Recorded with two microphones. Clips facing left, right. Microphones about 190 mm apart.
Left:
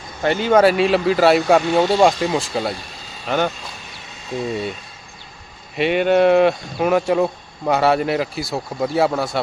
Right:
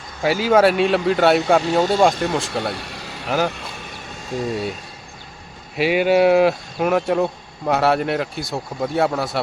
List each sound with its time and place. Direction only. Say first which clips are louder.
0.2 s speech: left 1 dB; 5° right (ahead or behind)
2.7 s vehicle: right 4 dB; 70° right (ahead or behind)
3.2 s speech: left 1 dB; 5° right (ahead or behind)
5.7 s speech: even; 5° right (ahead or behind)